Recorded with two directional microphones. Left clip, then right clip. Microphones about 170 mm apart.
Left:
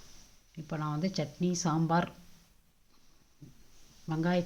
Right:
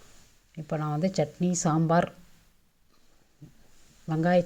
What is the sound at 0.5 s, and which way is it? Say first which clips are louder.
Speech: right 6 dB; 35° right (ahead or behind).